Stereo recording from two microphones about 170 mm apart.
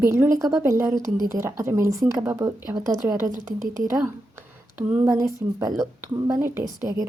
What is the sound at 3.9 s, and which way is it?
A woman's voice, 15° right (ahead or behind).